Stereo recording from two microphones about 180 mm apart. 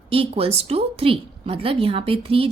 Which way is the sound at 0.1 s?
30° right (ahead or behind).